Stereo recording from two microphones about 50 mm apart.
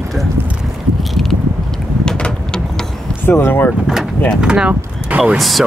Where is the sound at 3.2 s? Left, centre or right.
Left.